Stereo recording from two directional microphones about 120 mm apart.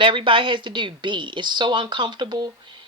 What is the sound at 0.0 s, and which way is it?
Speech, 45° right (ahead or behind).